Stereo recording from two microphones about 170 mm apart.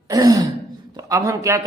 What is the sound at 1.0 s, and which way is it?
Speech, 20° right (ahead or behind).